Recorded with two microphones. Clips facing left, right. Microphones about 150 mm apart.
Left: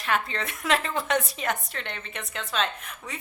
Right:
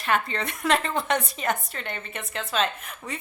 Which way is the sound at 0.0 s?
Centre (ahead or behind).